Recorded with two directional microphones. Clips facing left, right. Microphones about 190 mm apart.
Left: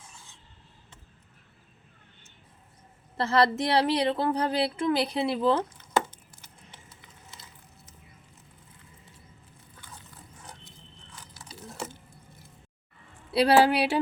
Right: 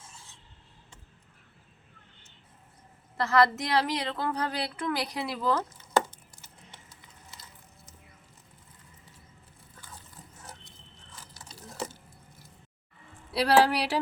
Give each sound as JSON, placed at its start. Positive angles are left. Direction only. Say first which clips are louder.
{"t": 3.2, "sound": "speech", "louder": "left 1 dB", "side_deg": 25}
{"t": 10.4, "sound": "dog", "louder": "even", "side_deg": 0}
{"t": 13.3, "sound": "speech", "louder": "left 2 dB", "side_deg": 25}